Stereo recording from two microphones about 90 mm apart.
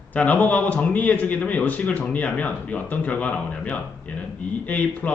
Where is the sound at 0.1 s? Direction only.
15° left (ahead or behind).